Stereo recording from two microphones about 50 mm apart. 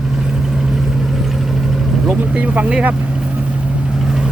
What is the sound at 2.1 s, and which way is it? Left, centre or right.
Speech, right.